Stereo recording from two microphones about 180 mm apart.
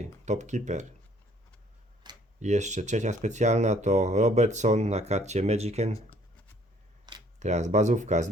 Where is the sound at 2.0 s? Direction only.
25° right (ahead or behind).